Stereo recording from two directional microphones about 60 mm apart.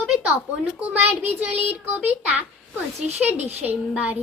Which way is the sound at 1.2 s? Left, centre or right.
Right.